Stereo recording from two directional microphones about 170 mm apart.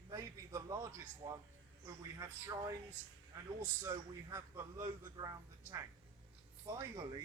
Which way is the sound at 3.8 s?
20° right (ahead or behind).